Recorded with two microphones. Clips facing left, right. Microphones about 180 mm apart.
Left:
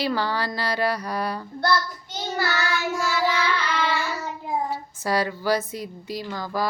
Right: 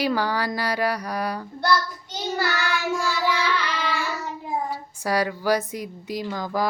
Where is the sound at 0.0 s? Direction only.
10° right (ahead or behind).